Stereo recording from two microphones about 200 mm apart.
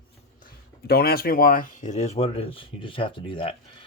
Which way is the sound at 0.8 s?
50° left (ahead or behind).